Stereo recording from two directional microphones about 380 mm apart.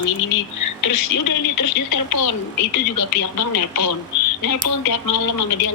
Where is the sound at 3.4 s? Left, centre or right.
Left.